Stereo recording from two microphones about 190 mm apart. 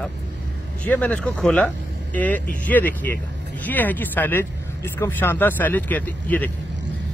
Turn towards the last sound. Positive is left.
turn(degrees=10)  # may be behind; listen again after turning